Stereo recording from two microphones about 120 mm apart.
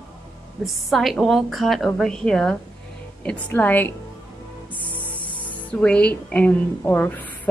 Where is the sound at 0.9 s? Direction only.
Centre (ahead or behind).